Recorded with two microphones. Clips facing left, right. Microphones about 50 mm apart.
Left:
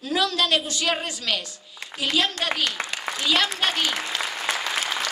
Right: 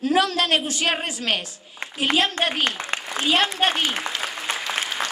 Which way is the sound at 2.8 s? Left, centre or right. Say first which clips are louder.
Right 2 dB; left.